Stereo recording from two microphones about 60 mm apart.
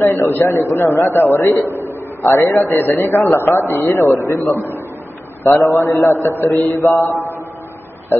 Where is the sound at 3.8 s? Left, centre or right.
Left.